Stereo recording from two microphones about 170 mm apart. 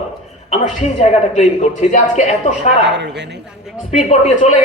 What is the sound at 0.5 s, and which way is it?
A man's voice, 40° left (ahead or behind).